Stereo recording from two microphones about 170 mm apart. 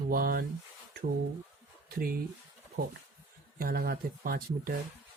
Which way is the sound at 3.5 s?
60° right (ahead or behind).